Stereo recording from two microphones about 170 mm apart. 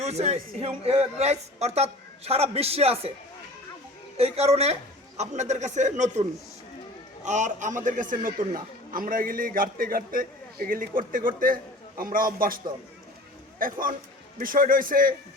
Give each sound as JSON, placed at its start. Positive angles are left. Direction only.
{"t": 0.0, "sound": "a man's voice", "side_deg": -40}
{"t": 4.2, "sound": "a man's voice", "side_deg": -40}
{"t": 7.3, "sound": "a man's voice", "side_deg": -45}
{"t": 13.6, "sound": "a man's voice", "side_deg": -55}